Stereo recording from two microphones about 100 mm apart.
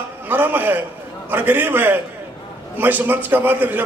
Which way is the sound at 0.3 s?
20° right (ahead or behind).